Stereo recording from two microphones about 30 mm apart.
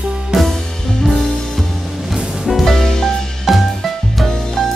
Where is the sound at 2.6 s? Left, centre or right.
Centre.